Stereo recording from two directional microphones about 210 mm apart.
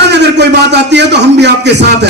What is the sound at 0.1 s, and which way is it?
A man's voice, 55° right (ahead or behind).